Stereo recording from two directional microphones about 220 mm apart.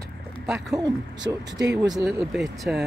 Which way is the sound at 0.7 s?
15° right (ahead or behind).